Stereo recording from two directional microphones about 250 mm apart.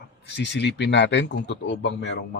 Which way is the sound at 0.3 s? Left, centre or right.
Left.